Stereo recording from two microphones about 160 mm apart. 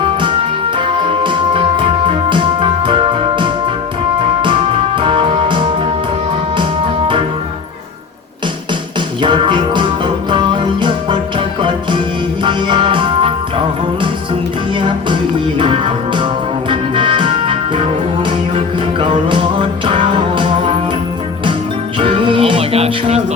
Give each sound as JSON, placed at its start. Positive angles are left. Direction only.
{"t": 0.0, "sound": "music", "side_deg": -30}
{"t": 9.2, "sound": "music", "side_deg": -30}
{"t": 12.5, "sound": "music", "side_deg": -30}
{"t": 15.5, "sound": "music", "side_deg": -30}
{"t": 22.0, "sound": "music", "side_deg": -35}